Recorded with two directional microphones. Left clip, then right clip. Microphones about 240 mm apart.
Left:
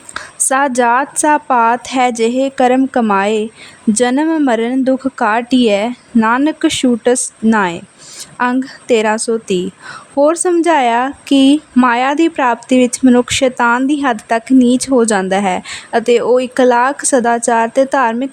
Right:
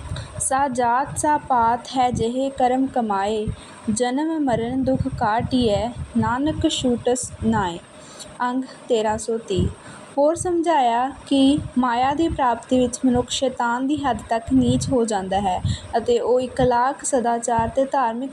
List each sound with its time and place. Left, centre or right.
0.4 s speech: left
2.2 s a woman's voice: left
2.6 s speech: left
11.3 s a woman's voice: left
11.8 s speech: left